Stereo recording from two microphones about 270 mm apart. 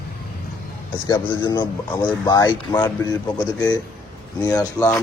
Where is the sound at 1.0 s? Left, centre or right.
Centre.